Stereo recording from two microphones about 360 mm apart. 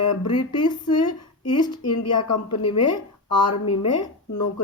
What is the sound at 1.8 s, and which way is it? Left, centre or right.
Speech, left.